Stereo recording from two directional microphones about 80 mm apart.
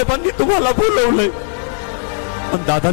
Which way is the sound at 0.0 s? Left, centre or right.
Centre.